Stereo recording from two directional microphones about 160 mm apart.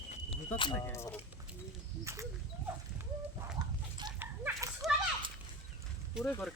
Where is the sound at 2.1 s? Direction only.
15° right (ahead or behind).